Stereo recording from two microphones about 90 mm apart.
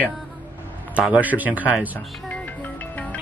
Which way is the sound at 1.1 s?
20° right (ahead or behind).